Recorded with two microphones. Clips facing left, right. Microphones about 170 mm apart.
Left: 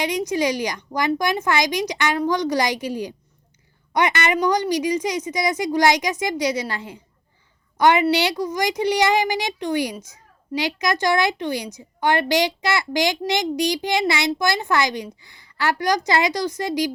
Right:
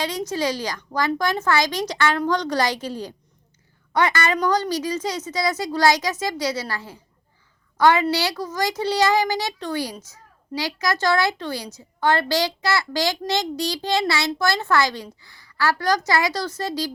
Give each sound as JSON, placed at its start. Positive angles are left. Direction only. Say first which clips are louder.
{"t": 0.0, "sound": "a child's voice", "louder": "left 3 dB", "side_deg": 15}